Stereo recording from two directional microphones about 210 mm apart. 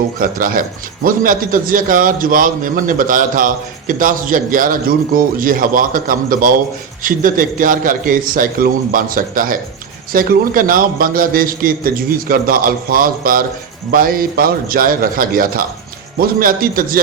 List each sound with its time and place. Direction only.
0.2 s a man's voice: 40° right (ahead or behind)